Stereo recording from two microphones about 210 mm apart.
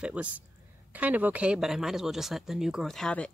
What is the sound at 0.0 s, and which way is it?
Speech, 5° right (ahead or behind).